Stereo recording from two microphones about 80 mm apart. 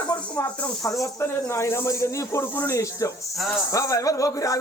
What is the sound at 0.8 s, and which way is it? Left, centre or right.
Speech, left.